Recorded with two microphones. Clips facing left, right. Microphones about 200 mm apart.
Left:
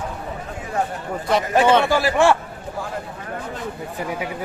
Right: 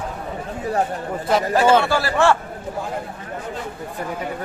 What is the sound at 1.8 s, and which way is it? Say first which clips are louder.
Speech: left 1 dB; 15° left (ahead or behind).